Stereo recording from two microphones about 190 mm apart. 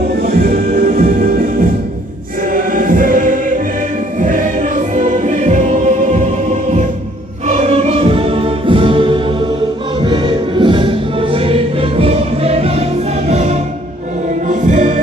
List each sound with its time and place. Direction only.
0.2 s music: 55° right (ahead or behind)
2.5 s choir: 45° right (ahead or behind)
4.2 s music: 45° right (ahead or behind)